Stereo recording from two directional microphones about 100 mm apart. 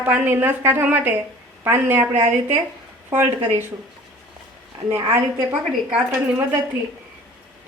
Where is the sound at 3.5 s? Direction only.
20° right (ahead or behind).